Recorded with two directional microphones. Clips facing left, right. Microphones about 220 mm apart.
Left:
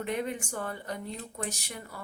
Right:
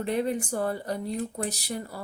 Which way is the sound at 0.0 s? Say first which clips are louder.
Right 5 dB; 35° right (ahead or behind).